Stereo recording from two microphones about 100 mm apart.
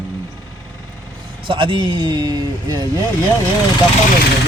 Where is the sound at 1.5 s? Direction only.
55° right (ahead or behind).